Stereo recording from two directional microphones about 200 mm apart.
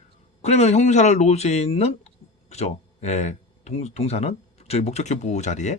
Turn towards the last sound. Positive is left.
turn(degrees=35)  # may be behind; listen again after turning